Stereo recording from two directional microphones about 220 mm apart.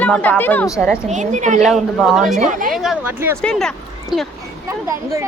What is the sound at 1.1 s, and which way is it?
Speech, 35° right (ahead or behind).